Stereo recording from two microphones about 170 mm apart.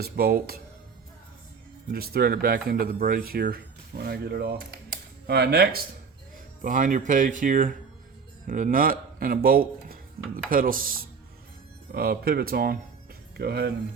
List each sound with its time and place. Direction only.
0.0 s speech: 65° right (ahead or behind)
1.9 s speech: 65° right (ahead or behind)
6.3 s speech: 50° right (ahead or behind); by 13.7 s 70° right (ahead or behind)